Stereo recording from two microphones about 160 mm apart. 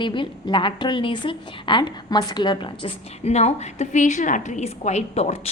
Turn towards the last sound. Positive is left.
turn(degrees=40)  # may be behind; listen again after turning